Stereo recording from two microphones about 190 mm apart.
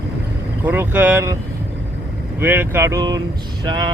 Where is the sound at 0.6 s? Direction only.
10° right (ahead or behind).